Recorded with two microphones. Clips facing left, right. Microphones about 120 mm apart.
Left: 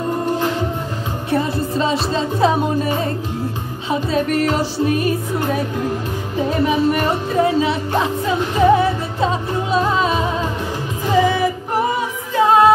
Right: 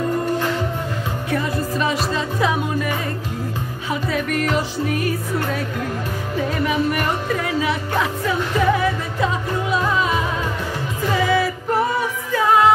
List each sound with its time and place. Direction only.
1.3 s music: 25° left (ahead or behind)
3.9 s music: 25° left (ahead or behind)
4.9 s music: 20° left (ahead or behind)